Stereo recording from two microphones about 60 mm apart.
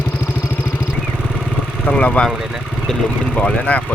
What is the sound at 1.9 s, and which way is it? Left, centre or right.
Vehicle, centre.